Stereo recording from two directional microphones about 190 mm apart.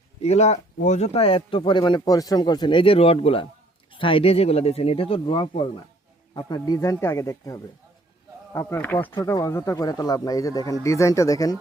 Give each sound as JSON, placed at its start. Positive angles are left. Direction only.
{"t": 0.2, "sound": "a man's voice", "side_deg": 35}